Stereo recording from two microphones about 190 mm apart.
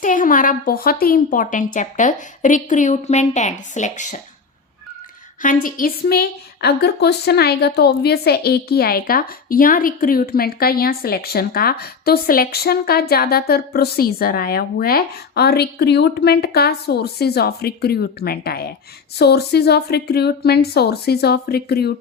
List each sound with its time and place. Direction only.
0.0 s a woman's voice: 45° left (ahead or behind)
5.4 s a woman's voice: 45° left (ahead or behind)